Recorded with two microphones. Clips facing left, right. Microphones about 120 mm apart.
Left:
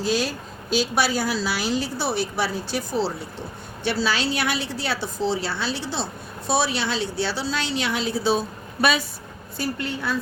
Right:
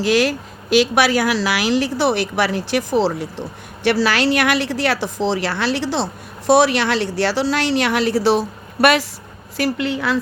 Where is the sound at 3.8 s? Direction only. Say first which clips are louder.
Right 7 dB; 75° right (ahead or behind).